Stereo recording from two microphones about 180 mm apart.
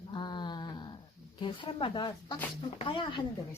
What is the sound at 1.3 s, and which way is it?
Speech, 30° left (ahead or behind).